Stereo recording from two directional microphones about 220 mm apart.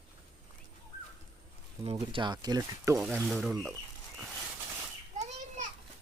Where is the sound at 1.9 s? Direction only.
20° right (ahead or behind).